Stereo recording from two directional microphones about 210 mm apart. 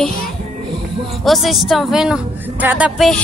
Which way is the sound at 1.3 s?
Centre (ahead or behind).